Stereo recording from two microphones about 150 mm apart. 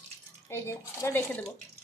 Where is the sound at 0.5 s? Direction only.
20° left (ahead or behind).